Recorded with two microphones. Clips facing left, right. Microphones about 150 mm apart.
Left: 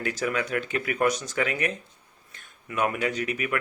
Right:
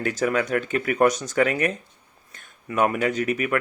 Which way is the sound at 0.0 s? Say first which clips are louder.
Right 5 dB; 45° right (ahead or behind).